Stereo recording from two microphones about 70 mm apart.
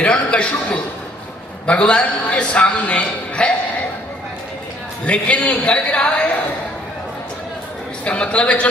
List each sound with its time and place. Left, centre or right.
0.0 s a sound: centre
1.6 s a man's voice: centre
5.0 s a man's voice: centre
8.0 s a man's voice: centre